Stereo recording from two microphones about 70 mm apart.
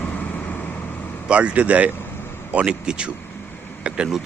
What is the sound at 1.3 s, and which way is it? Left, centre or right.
Speech, centre.